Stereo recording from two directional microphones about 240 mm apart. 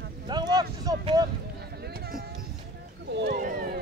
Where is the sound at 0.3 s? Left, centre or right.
Centre.